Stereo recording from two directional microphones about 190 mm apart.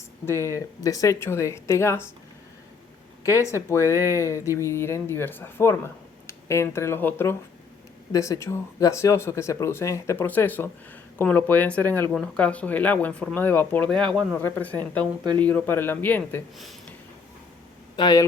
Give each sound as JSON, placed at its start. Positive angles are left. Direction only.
{"t": 0.3, "sound": "speech", "side_deg": 15}
{"t": 3.2, "sound": "speech", "side_deg": 15}
{"t": 17.9, "sound": "speech", "side_deg": 20}